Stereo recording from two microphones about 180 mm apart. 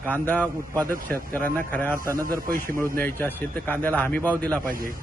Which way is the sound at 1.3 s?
10° left (ahead or behind).